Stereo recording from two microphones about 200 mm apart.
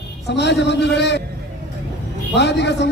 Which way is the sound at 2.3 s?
60° left (ahead or behind).